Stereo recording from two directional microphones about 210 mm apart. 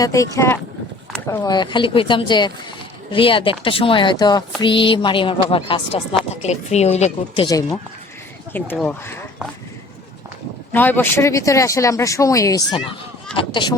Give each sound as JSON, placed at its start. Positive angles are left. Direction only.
{"t": 0.0, "sound": "speech", "side_deg": 15}
{"t": 1.5, "sound": "speech", "side_deg": 20}
{"t": 8.8, "sound": "speech", "side_deg": 10}
{"t": 10.7, "sound": "speech", "side_deg": 10}